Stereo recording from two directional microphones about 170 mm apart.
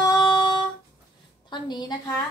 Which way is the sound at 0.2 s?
25° left (ahead or behind).